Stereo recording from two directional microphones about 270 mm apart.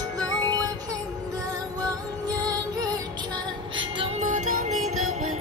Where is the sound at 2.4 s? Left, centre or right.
Centre.